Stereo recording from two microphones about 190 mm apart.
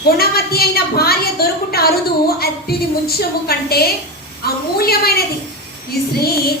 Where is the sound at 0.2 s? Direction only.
55° left (ahead or behind).